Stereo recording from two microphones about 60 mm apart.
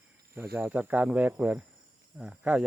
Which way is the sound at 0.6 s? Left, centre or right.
Right.